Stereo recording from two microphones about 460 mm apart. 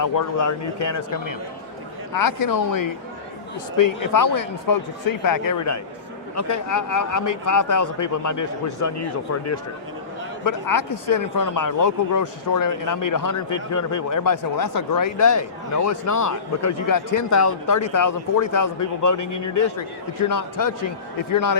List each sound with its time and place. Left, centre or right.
0.0 s speech: left
10.4 s speech: left